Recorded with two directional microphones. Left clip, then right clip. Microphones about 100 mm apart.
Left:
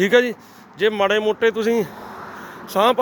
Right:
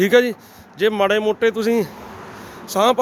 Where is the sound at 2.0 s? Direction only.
20° left (ahead or behind).